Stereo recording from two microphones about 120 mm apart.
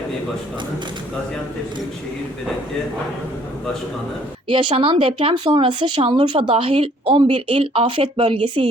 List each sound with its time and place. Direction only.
4.4 s speech: 45° right (ahead or behind)